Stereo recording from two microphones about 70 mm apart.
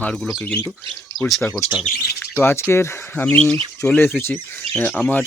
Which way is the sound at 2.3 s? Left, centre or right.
Left.